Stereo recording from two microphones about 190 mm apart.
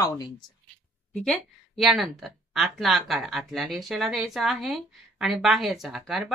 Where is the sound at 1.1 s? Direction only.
Centre (ahead or behind).